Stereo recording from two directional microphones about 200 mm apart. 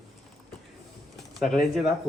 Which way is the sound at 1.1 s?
Centre (ahead or behind).